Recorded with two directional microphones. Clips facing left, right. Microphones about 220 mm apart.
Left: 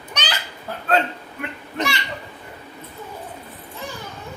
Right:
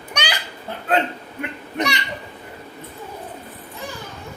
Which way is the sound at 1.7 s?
20° right (ahead or behind).